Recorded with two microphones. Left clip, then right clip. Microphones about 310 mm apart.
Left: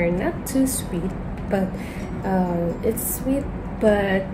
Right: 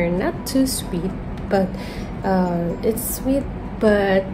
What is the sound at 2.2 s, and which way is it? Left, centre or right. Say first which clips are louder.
Speech: right 3 dB; centre.